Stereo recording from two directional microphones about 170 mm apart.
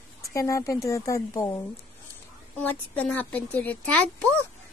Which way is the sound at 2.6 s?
10° left (ahead or behind).